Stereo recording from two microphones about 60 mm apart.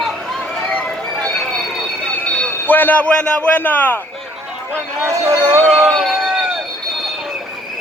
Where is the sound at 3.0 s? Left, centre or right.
Centre.